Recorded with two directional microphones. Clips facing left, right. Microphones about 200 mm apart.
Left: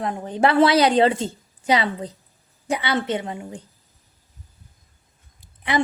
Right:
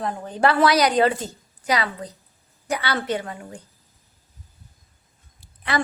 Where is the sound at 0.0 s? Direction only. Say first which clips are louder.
Left 1 dB; 20° left (ahead or behind).